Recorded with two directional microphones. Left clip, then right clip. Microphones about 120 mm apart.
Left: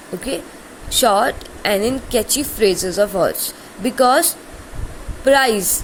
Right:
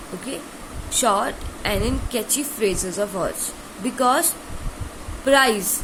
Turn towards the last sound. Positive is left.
turn(degrees=45)  # may be behind; listen again after turning